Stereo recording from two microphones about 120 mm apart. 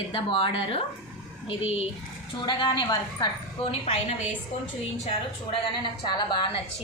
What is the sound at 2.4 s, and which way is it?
Speech, 40° left (ahead or behind).